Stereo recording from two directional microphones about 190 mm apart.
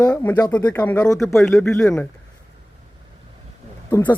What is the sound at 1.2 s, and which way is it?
Speech, centre (ahead or behind).